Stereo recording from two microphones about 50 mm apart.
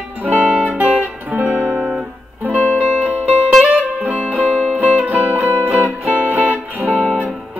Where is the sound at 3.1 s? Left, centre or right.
Right.